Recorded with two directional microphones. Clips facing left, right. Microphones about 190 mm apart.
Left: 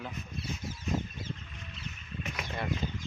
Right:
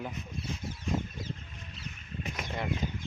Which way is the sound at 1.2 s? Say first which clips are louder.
Right 1 dB; 40° right (ahead or behind).